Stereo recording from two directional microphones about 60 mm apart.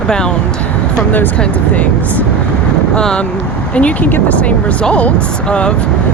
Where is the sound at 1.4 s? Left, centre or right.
Left.